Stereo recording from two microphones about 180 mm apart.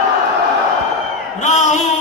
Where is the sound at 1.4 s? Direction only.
40° left (ahead or behind).